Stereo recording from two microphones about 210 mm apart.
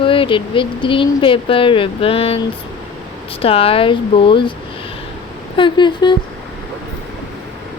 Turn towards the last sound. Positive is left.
turn(degrees=20)  # may be behind; listen again after turning